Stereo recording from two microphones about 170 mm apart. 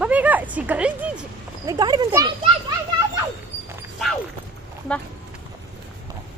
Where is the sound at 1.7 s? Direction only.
25° right (ahead or behind).